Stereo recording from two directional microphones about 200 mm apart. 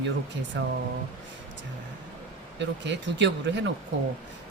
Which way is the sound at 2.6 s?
60° right (ahead or behind).